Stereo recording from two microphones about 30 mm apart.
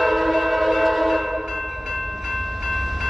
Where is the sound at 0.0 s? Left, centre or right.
Centre.